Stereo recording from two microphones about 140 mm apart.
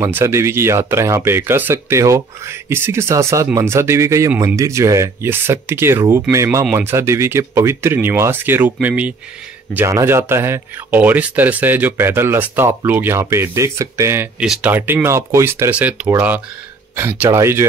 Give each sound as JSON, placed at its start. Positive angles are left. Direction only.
{"t": 0.0, "sound": "speech", "side_deg": -20}
{"t": 14.4, "sound": "speech", "side_deg": -5}